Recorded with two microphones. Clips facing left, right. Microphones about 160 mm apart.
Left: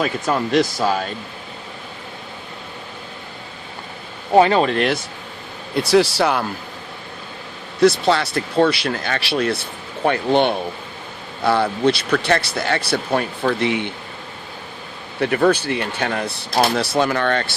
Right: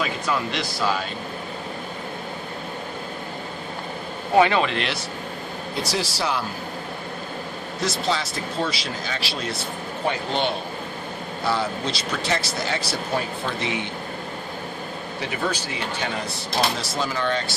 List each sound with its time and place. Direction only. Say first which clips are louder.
0.0 s speech: left 5 dB; 45° left (ahead or behind)
4.4 s speech: left 5 dB; 35° left (ahead or behind)
5.7 s speech: left 12 dB; 60° left (ahead or behind)
7.8 s speech: left 10 dB; 65° left (ahead or behind)
15.2 s speech: left 11 dB; 55° left (ahead or behind)